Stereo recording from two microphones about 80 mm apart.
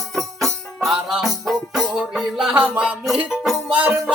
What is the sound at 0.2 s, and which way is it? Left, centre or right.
Music, centre.